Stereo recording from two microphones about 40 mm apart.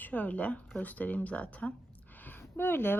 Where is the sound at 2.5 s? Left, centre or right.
Left.